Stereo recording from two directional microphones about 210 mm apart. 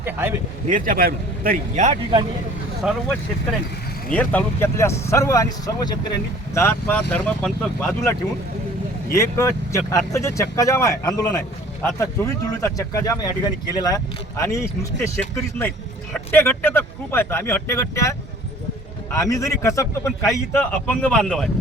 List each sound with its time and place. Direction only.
0.0 s speech: 10° right (ahead or behind)
0.7 s speech: 40° right (ahead or behind)
2.8 s speech: 5° right (ahead or behind)
4.1 s speech: 5° left (ahead or behind)
9.1 s speech: 15° left (ahead or behind)